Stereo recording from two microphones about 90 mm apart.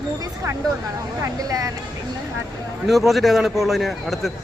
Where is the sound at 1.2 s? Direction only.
40° right (ahead or behind).